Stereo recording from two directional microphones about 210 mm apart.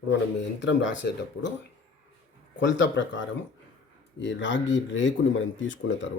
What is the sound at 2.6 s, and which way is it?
Speech, 60° left (ahead or behind).